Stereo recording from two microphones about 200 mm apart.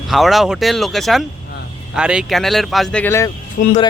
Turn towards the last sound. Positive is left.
turn(degrees=45)  # may be behind; listen again after turning